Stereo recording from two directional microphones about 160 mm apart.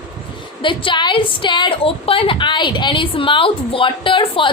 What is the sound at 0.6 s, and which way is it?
A woman's voice, 30° left (ahead or behind).